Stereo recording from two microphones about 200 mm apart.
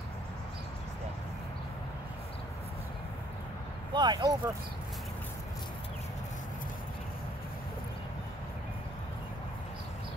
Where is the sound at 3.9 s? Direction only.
20° right (ahead or behind).